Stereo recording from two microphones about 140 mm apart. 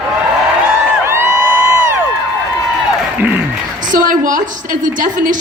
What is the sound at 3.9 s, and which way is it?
A woman's voice, 70° right (ahead or behind).